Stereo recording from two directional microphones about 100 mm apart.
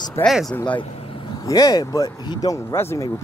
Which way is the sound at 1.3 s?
35° left (ahead or behind).